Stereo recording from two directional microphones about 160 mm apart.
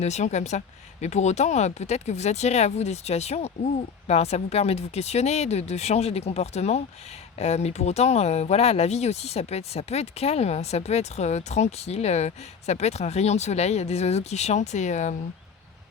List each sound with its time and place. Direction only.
0.0 s speech: 45° left (ahead or behind)